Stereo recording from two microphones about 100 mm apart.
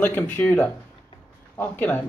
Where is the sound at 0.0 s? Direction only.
15° left (ahead or behind).